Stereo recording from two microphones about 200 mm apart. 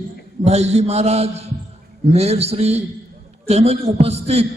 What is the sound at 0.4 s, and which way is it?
A man's voice, 30° right (ahead or behind).